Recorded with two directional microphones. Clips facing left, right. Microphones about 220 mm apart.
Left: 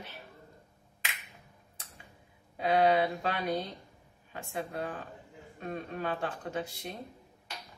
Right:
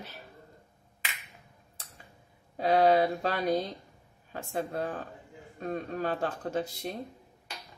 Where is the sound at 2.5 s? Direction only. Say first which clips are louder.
Right 3 dB; 40° right (ahead or behind).